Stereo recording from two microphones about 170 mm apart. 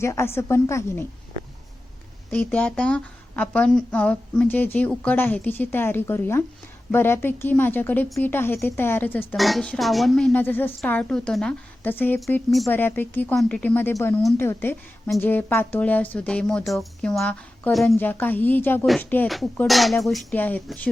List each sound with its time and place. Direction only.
0.0 s speech: 15° left (ahead or behind)
2.3 s speech: 10° left (ahead or behind)
9.3 s speech: centre (ahead or behind)
17.9 s speech: 10° left (ahead or behind)